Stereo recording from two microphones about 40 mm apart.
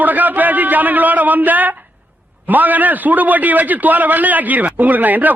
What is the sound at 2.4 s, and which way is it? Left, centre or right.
Speech, right.